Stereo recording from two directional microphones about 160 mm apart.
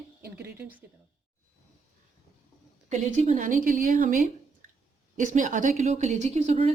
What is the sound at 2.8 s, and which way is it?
A woman's voice, 45° right (ahead or behind).